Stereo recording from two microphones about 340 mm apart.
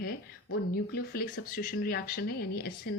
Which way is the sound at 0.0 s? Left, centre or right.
Left.